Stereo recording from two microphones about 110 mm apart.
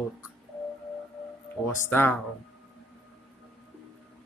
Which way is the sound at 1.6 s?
20° left (ahead or behind).